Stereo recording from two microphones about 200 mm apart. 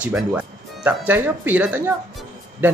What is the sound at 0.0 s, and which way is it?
Speech, 5° right (ahead or behind).